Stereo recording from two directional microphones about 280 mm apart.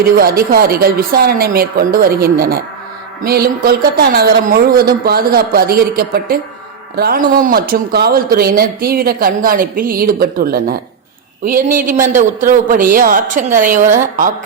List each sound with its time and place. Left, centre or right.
0.2 s a woman's voice: right